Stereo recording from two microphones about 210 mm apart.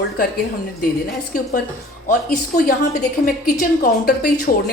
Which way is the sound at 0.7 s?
45° left (ahead or behind).